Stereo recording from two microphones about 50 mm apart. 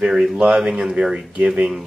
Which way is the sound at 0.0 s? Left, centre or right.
Centre.